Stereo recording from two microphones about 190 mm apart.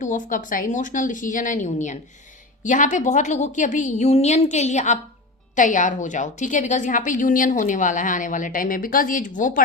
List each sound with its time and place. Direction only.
0.0 s a woman's voice: 40° left (ahead or behind)